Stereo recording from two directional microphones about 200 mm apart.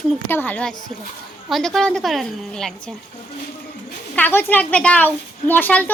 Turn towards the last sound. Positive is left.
turn(degrees=10)  # may be behind; listen again after turning